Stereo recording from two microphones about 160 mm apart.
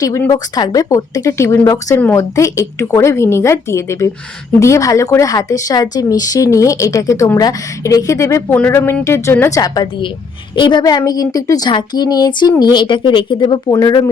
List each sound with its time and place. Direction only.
0.3 s a woman's voice: 25° left (ahead or behind)